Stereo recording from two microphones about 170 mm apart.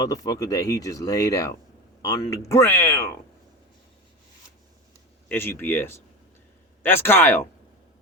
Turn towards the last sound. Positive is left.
turn(degrees=15)  # may be behind; listen again after turning